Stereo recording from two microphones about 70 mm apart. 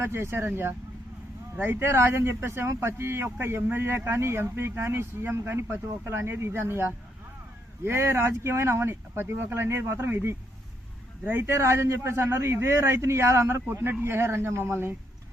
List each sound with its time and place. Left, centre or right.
0.0 s a man's voice: right
7.9 s a man's voice: right